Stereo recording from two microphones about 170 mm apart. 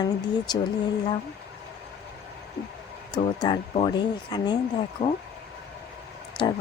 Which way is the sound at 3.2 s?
30° left (ahead or behind).